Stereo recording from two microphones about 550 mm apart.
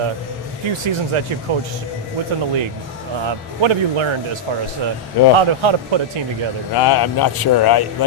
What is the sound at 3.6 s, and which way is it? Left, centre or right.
Speech, right.